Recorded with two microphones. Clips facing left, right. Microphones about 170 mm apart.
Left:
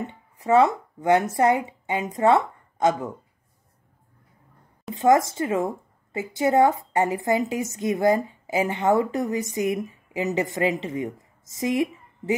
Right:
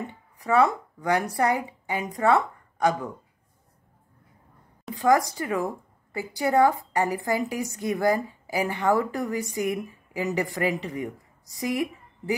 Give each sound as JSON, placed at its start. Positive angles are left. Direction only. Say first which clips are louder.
{"t": 0.0, "sound": "a woman's voice", "louder": "left 3 dB", "side_deg": 20}
{"t": 4.9, "sound": "a woman's voice", "louder": "left 3 dB", "side_deg": 25}